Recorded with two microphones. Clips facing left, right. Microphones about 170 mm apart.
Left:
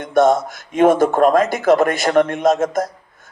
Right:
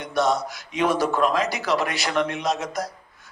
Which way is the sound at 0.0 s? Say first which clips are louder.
Left 8 dB; 50° left (ahead or behind).